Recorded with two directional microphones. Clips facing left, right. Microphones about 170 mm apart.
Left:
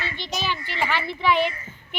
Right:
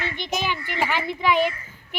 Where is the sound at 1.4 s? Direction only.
45° right (ahead or behind).